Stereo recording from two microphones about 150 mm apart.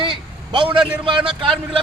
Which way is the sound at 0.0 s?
35° right (ahead or behind).